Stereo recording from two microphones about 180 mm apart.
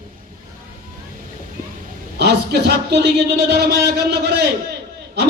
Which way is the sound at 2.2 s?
65° right (ahead or behind).